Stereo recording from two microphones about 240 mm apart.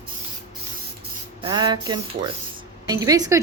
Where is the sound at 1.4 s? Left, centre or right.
Centre.